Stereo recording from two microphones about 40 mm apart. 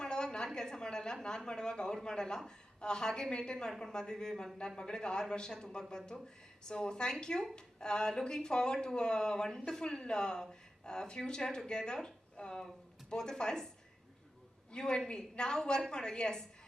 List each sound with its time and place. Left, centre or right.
0.0 s a sound: centre
1.5 s speech: centre
14.7 s speech: left